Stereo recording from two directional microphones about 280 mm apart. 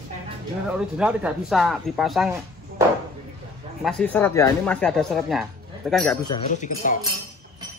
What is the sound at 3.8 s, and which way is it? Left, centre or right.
A man's voice, centre.